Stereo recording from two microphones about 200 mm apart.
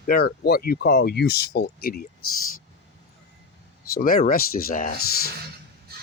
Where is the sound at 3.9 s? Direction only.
45° left (ahead or behind).